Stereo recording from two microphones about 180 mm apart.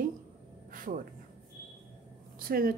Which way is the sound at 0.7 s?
50° right (ahead or behind).